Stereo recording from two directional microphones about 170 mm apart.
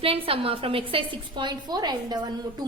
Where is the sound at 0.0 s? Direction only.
35° right (ahead or behind).